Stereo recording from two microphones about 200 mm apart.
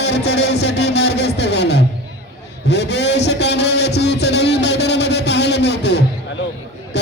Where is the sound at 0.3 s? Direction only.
60° left (ahead or behind).